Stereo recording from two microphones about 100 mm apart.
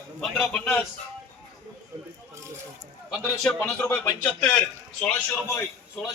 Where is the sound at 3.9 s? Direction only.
15° left (ahead or behind).